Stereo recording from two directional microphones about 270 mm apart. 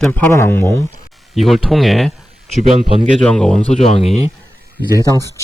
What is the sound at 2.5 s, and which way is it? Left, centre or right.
Speech, left.